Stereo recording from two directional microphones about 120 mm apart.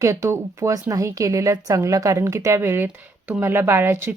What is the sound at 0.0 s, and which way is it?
A woman's voice, 25° right (ahead or behind).